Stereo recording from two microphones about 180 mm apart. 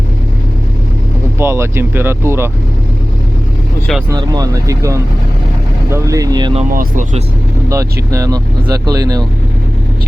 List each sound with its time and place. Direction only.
1.4 s speech: 15° right (ahead or behind)
4.1 s speech: 20° right (ahead or behind)
6.7 s speech: 50° right (ahead or behind)
7.7 s speech: 20° right (ahead or behind)